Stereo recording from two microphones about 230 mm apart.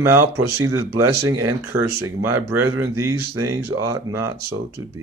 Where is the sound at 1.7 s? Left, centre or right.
Centre.